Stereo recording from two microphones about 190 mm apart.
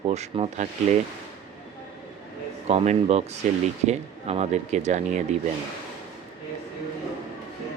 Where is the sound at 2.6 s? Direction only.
35° right (ahead or behind).